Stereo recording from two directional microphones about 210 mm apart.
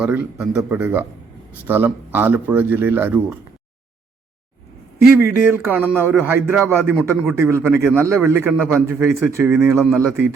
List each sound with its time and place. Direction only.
0.0 s speech: 5° right (ahead or behind)
5.1 s speech: 10° right (ahead or behind)